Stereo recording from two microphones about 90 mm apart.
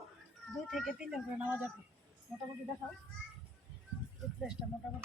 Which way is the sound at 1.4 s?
20° right (ahead or behind).